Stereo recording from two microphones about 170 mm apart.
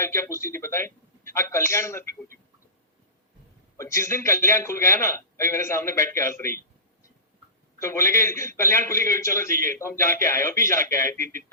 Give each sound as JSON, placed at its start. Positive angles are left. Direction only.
{"t": 0.0, "sound": "a man's voice", "side_deg": 15}
{"t": 3.8, "sound": "a man's voice", "side_deg": 15}
{"t": 7.8, "sound": "a man's voice", "side_deg": 15}